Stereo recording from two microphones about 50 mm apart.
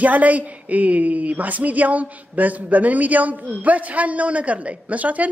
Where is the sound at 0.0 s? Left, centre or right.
Right.